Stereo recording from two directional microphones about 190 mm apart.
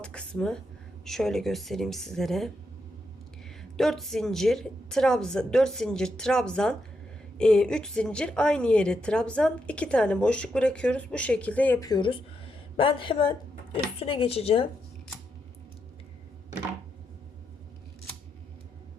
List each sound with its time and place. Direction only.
0.0 s a woman's voice: 5° left (ahead or behind)
3.6 s a woman's voice: centre (ahead or behind)
11.9 s speech: 25° left (ahead or behind)